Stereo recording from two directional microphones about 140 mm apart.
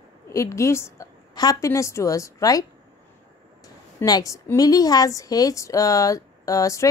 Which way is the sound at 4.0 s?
25° left (ahead or behind).